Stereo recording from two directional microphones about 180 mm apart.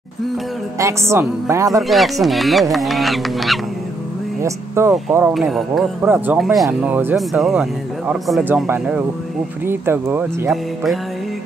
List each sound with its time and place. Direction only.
0.7 s a woman's voice: 15° right (ahead or behind)
1.8 s speech: centre (ahead or behind)
4.4 s speech: 15° right (ahead or behind)
5.3 s speech: centre (ahead or behind)
6.0 s a woman's voice: 10° right (ahead or behind)
6.4 s a woman's voice: centre (ahead or behind)
10.5 s speech: centre (ahead or behind)